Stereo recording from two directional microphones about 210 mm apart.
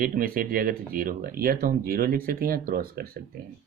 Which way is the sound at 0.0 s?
45° right (ahead or behind).